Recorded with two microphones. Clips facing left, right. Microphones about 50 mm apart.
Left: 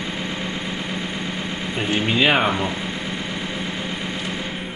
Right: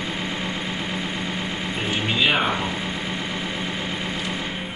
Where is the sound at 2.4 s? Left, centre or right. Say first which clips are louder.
Left 2 dB; centre.